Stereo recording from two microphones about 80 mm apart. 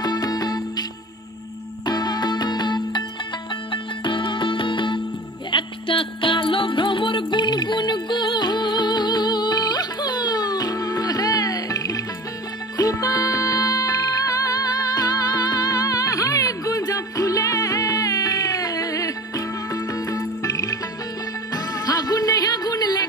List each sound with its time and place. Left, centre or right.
0.0 s music: left
1.9 s music: left
3.7 s music: left